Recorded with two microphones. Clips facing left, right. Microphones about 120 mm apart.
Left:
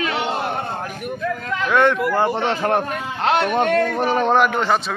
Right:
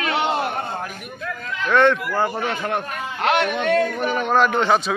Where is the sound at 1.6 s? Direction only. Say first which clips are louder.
Even; 10° left (ahead or behind).